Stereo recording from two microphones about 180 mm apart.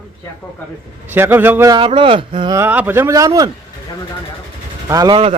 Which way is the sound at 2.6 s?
10° right (ahead or behind).